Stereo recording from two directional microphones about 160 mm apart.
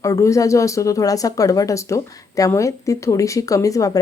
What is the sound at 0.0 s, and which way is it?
Speech, 20° left (ahead or behind).